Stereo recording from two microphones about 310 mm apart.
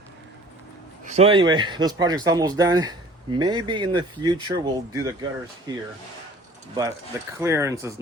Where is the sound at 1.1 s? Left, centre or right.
Centre.